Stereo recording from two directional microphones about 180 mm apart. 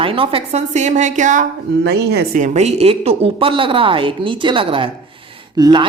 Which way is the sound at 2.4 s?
40° right (ahead or behind).